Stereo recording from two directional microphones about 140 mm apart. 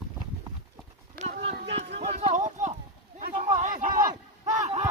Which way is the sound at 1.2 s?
45° right (ahead or behind).